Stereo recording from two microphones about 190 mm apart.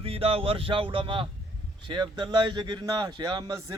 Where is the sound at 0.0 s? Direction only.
30° right (ahead or behind).